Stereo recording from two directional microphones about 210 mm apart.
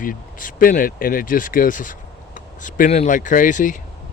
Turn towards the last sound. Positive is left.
turn(degrees=40)  # may be behind; listen again after turning